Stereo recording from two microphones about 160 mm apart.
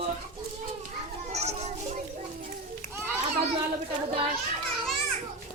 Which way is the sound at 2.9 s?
15° right (ahead or behind).